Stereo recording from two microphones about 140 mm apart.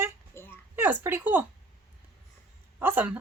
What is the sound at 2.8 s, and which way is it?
Speech, 15° right (ahead or behind).